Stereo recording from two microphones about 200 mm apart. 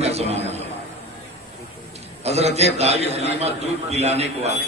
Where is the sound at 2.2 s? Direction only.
30° right (ahead or behind).